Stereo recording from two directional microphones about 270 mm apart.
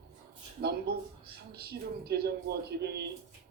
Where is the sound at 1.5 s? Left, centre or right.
Right.